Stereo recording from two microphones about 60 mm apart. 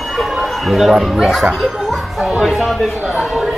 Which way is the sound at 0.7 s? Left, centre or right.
Centre.